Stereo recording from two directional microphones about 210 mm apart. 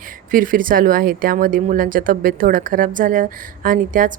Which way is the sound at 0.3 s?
40° right (ahead or behind).